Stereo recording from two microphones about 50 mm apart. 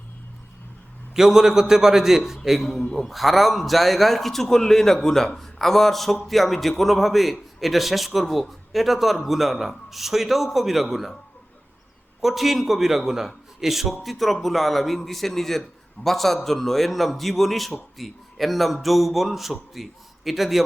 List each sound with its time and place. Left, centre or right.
1.1 s a man's voice: centre
12.2 s a man's voice: centre